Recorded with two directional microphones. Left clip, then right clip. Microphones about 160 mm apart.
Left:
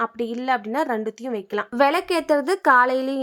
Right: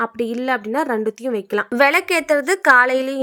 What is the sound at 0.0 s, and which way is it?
A woman's voice, 20° right (ahead or behind).